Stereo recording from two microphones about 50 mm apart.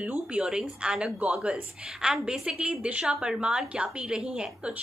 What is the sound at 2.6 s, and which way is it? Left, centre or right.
A woman's voice, right.